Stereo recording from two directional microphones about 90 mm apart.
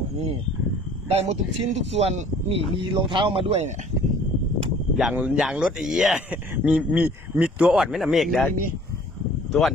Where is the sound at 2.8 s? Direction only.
60° right (ahead or behind); by 3.5 s 80° right.